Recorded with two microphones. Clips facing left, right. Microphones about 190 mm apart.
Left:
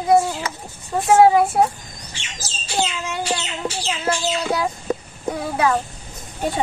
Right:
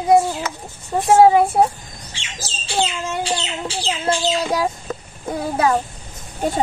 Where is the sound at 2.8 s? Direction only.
30° right (ahead or behind).